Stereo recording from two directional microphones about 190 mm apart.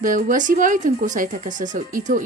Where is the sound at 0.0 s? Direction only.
45° right (ahead or behind).